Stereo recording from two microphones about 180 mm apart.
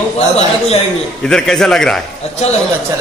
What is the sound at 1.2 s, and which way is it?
Speech, 5° left (ahead or behind).